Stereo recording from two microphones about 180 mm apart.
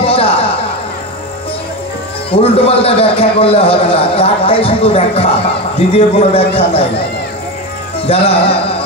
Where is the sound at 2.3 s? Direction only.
30° left (ahead or behind).